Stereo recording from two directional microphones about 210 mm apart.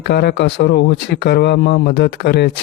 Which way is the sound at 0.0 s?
50° left (ahead or behind).